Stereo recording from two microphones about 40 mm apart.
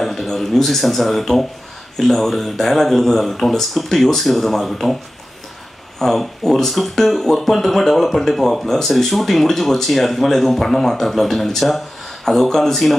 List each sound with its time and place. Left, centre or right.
0.0 s speech: centre
5.9 s speech: centre